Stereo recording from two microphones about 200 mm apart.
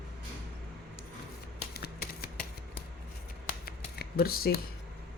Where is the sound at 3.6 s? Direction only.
50° left (ahead or behind).